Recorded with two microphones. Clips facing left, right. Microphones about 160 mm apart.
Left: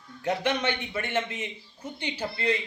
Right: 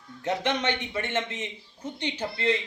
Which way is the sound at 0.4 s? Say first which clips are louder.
Even; 10° left (ahead or behind).